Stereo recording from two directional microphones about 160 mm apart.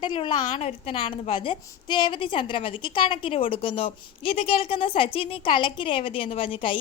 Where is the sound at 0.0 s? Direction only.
30° left (ahead or behind).